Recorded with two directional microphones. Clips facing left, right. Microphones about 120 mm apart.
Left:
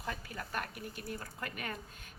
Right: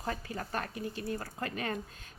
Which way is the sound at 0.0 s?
35° right (ahead or behind).